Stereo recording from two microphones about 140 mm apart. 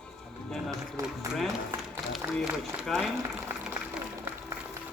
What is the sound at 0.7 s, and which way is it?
A man's voice, 25° right (ahead or behind).